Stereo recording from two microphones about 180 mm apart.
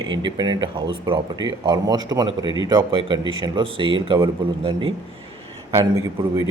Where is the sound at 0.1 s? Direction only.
25° right (ahead or behind).